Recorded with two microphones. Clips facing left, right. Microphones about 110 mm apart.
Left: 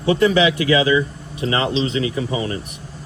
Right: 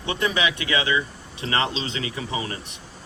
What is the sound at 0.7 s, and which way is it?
Speech, 25° left (ahead or behind).